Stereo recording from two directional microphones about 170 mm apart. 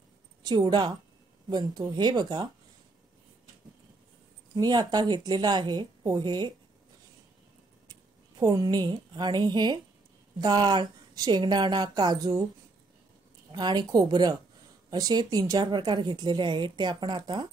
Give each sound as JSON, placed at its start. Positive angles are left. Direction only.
{"t": 0.4, "sound": "a woman's voice", "side_deg": -25}
{"t": 4.6, "sound": "a woman's voice", "side_deg": -25}
{"t": 7.9, "sound": "a woman's voice", "side_deg": -20}
{"t": 13.5, "sound": "a woman's voice", "side_deg": -25}